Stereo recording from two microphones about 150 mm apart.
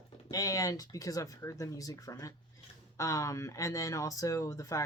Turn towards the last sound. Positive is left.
turn(degrees=25)  # may be behind; listen again after turning